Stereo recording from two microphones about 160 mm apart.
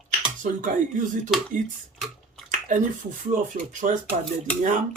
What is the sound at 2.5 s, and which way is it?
Speech, 55° right (ahead or behind).